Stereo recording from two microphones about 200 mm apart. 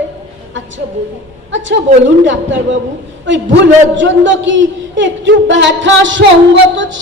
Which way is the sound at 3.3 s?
65° right (ahead or behind).